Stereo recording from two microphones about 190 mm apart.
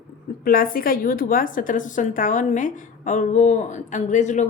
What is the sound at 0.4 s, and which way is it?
A woman's voice, 50° left (ahead or behind).